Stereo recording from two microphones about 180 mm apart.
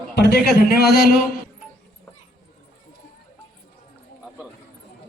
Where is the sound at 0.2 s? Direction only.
65° left (ahead or behind).